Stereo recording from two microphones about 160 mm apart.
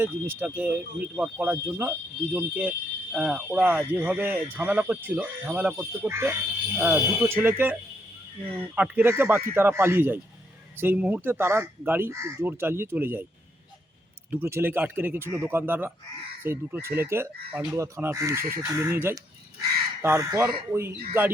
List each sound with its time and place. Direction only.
0.0 s speech: 15° right (ahead or behind)
14.3 s speech: 15° right (ahead or behind)